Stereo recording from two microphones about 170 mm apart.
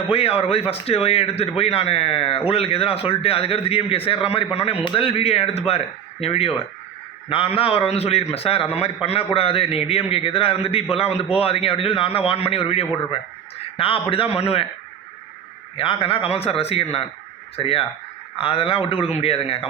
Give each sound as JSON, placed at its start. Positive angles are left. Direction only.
{"t": 0.1, "sound": "a man's voice", "side_deg": 35}
{"t": 15.8, "sound": "a man's voice", "side_deg": 30}